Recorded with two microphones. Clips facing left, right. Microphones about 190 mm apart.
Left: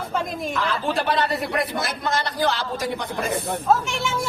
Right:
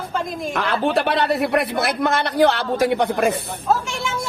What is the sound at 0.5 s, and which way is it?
Speech, 65° right (ahead or behind).